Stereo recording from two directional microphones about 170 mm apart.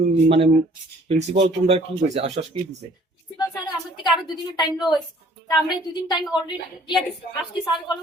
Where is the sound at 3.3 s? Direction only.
20° left (ahead or behind).